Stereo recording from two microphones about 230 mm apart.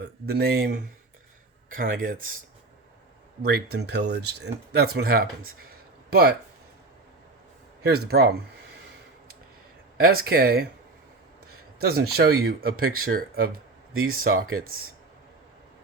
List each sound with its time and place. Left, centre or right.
0.0 s speech: right
3.4 s speech: right
7.8 s speech: right
10.0 s speech: right
11.8 s speech: right